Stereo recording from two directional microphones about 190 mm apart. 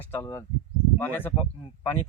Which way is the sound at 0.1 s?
10° left (ahead or behind).